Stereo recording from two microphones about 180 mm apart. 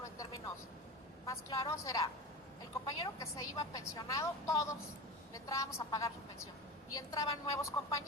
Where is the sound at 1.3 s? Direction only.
15° left (ahead or behind).